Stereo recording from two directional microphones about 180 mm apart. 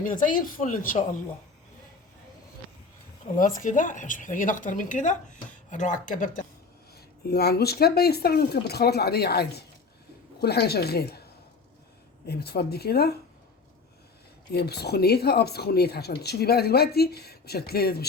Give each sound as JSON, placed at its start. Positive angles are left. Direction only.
{"t": 0.0, "sound": "speech", "side_deg": 50}
{"t": 3.3, "sound": "speech", "side_deg": 45}
{"t": 6.9, "sound": "speech", "side_deg": 60}
{"t": 12.2, "sound": "speech", "side_deg": 65}
{"t": 14.5, "sound": "speech", "side_deg": 60}